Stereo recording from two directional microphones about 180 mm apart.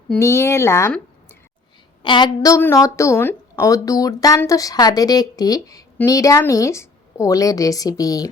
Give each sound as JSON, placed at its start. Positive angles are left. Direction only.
{"t": 0.1, "sound": "speech", "side_deg": 15}
{"t": 2.0, "sound": "a woman's voice", "side_deg": 25}